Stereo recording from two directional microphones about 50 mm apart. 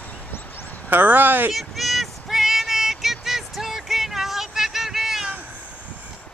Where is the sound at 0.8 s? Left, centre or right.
Right.